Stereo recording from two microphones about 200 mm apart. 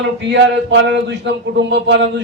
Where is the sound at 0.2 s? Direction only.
60° right (ahead or behind).